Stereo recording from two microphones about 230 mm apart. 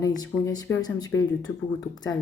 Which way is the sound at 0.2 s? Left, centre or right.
Centre.